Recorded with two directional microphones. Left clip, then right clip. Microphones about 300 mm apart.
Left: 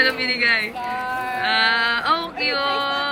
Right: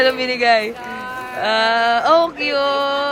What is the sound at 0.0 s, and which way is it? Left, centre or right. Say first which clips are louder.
Speech: right 3 dB; centre.